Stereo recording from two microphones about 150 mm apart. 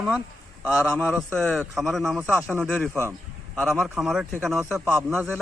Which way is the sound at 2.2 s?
10° right (ahead or behind).